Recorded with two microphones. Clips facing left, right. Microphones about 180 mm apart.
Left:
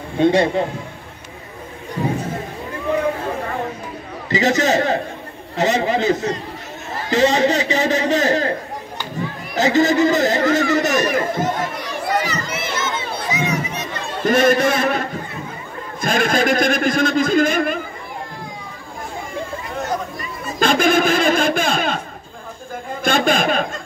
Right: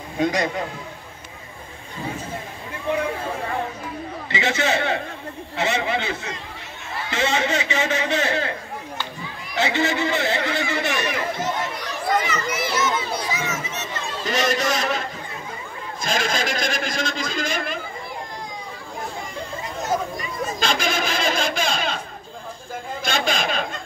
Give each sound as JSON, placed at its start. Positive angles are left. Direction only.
{"t": 0.2, "sound": "a man's voice", "side_deg": 30}
{"t": 2.0, "sound": "music", "side_deg": 65}
{"t": 4.3, "sound": "a man's voice", "side_deg": 40}
{"t": 12.6, "sound": "children playing", "side_deg": 25}
{"t": 13.3, "sound": "crowd", "side_deg": 15}
{"t": 14.2, "sound": "a man's voice", "side_deg": 55}
{"t": 20.5, "sound": "a sound", "side_deg": 55}
{"t": 23.0, "sound": "a sound", "side_deg": 55}